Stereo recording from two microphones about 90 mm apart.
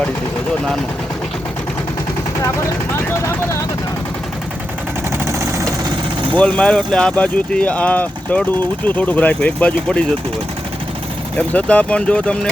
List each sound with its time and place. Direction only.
6.3 s speech: 10° left (ahead or behind)
11.3 s speech: 15° left (ahead or behind)